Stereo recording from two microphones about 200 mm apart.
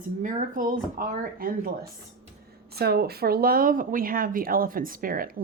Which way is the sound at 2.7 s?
50° right (ahead or behind).